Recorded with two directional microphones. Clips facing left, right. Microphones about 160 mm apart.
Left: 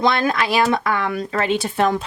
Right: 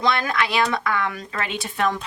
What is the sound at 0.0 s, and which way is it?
Speech, 30° left (ahead or behind).